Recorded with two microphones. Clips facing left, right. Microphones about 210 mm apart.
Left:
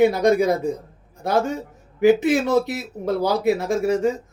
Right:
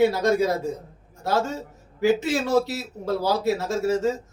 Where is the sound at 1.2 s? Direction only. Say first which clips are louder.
Left 3 dB; 20° left (ahead or behind).